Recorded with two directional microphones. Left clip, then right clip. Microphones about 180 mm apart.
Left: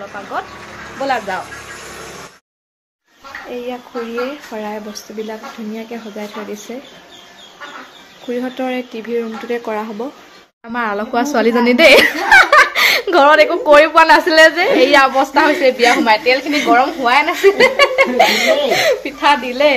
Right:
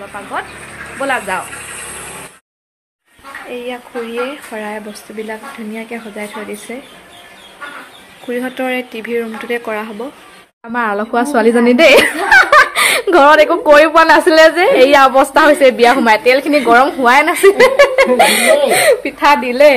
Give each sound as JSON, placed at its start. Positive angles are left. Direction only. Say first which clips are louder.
{"t": 3.4, "sound": "speech", "louder": "right 1 dB", "side_deg": 5}
{"t": 8.3, "sound": "speech", "louder": "right 2 dB", "side_deg": 0}
{"t": 10.7, "sound": "speech", "louder": "right 3 dB", "side_deg": -10}